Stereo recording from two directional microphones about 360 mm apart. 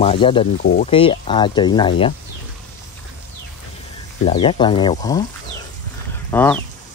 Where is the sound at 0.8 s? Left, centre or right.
Centre.